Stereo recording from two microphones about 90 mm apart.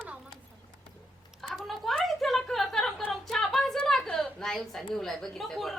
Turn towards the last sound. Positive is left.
turn(degrees=0)  # may be behind; listen again after turning